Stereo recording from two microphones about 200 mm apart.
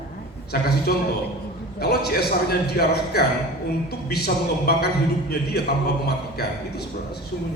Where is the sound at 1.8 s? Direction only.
50° left (ahead or behind).